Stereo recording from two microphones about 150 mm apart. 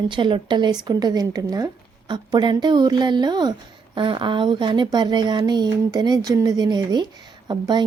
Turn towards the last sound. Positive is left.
turn(degrees=-30)  # may be behind; listen again after turning